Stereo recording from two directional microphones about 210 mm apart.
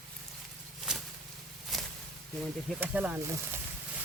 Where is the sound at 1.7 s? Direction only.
Centre (ahead or behind).